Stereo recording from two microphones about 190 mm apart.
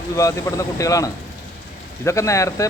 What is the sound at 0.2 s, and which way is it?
Speech, 15° left (ahead or behind).